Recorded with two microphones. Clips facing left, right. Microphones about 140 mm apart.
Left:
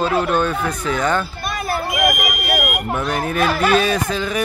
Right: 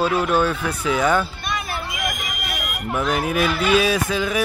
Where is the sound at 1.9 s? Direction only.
50° left (ahead or behind).